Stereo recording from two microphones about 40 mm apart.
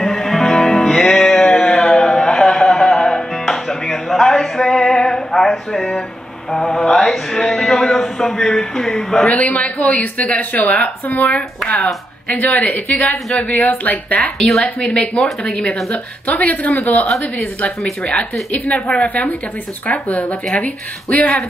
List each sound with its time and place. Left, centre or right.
0.0 s music: centre
4.9 s a sound: centre
6.5 s speech: centre
9.2 s a man's voice: left
14.4 s speech: centre
14.8 s speech: left
15.9 s a man's voice: left
17.0 s speech: centre
18.5 s a man's voice: left
19.0 s a man's voice: left